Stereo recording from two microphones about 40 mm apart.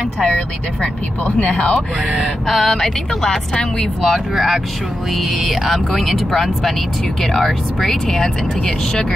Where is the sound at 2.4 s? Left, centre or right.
Centre.